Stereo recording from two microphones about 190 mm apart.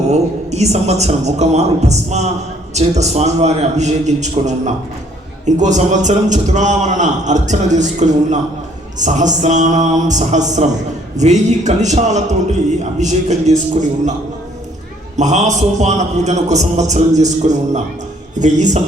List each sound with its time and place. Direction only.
0.1 s a man's voice: 35° right (ahead or behind)
15.1 s a man's voice: 40° right (ahead or behind)